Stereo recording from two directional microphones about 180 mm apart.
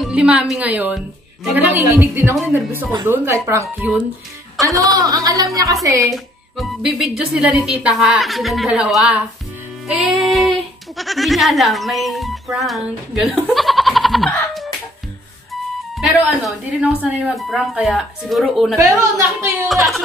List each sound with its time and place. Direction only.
0.0 s a woman's voice: 5° right (ahead or behind)
4.9 s music: 20° right (ahead or behind)
5.9 s a woman's voice: 15° right (ahead or behind)
6.1 s speech: centre (ahead or behind)
16.0 s speech: centre (ahead or behind)
18.8 s a woman's voice: 15° right (ahead or behind)